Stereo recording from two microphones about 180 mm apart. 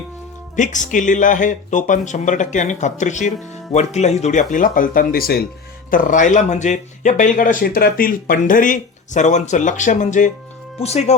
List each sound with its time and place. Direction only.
0.5 s speech: 45° left (ahead or behind)